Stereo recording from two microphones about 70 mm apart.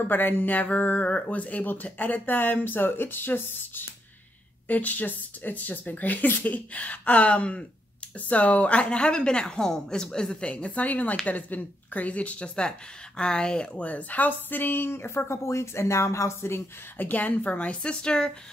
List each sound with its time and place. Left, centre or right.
0.1 s a woman's voice: left
17.1 s a woman's voice: left